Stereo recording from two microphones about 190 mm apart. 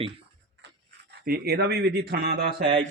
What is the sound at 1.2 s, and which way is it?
A man's voice, 55° right (ahead or behind).